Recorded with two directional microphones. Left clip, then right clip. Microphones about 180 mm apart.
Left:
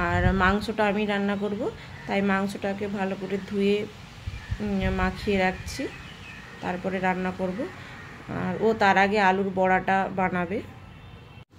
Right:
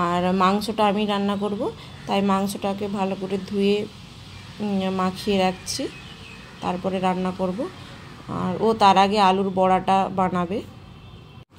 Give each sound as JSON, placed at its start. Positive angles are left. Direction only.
{"t": 0.0, "sound": "speech", "side_deg": -10}